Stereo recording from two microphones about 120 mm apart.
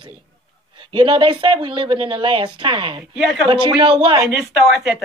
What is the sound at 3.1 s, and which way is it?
Speech, 5° right (ahead or behind).